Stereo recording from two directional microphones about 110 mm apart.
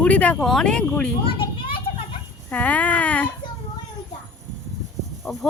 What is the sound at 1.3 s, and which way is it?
Children playing, 50° left (ahead or behind).